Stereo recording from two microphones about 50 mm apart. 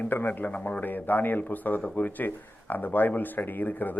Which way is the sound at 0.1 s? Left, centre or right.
Left.